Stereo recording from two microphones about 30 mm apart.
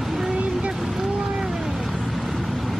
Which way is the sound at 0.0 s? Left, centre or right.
Centre.